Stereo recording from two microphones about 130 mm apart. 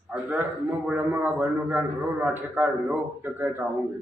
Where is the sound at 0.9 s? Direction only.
15° right (ahead or behind).